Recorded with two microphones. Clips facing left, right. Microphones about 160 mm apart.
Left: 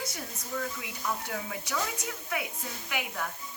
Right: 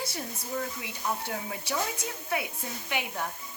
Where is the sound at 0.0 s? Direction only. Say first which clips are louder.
Right 3 dB; 30° right (ahead or behind).